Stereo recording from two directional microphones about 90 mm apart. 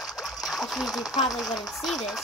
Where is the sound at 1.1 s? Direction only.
45° left (ahead or behind).